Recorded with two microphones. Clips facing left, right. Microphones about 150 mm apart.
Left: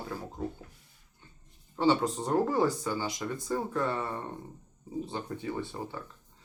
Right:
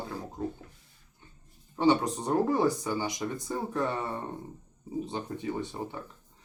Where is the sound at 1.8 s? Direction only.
15° right (ahead or behind).